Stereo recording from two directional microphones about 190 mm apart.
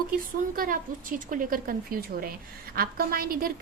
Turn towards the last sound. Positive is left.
turn(degrees=-50)  # may be behind; listen again after turning